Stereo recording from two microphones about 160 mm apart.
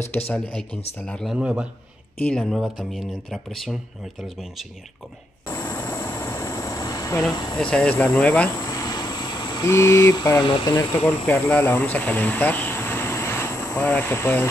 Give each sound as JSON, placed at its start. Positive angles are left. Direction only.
{"t": 0.3, "sound": "speech", "side_deg": 5}
{"t": 2.2, "sound": "speech", "side_deg": 5}
{"t": 5.5, "sound": "vehicle", "side_deg": 15}
{"t": 7.5, "sound": "speech", "side_deg": 5}
{"t": 8.5, "sound": "vehicle", "side_deg": 20}
{"t": 9.7, "sound": "speech", "side_deg": 15}
{"t": 11.2, "sound": "speech", "side_deg": 15}